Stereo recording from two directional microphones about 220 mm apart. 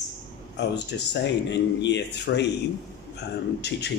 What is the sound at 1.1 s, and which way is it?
Speech, 50° left (ahead or behind).